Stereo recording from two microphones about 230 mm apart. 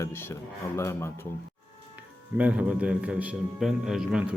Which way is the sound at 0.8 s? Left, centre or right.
Centre.